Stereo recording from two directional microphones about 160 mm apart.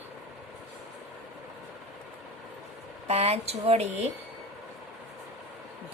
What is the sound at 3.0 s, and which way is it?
Speech, 40° right (ahead or behind).